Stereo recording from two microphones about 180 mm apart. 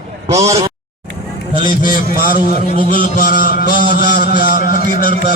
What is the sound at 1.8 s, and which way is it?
A man's voice, 55° left (ahead or behind).